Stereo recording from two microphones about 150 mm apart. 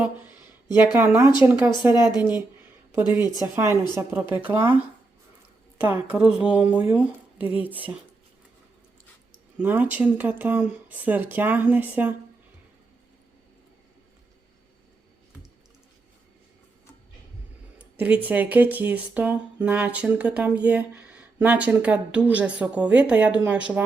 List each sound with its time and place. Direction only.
0.9 s speech: 15° right (ahead or behind)
2.0 s a woman's voice: 25° left (ahead or behind)
3.4 s speech: 15° right (ahead or behind)
9.6 s speech: 10° right (ahead or behind)
17.7 s speech: 10° right (ahead or behind)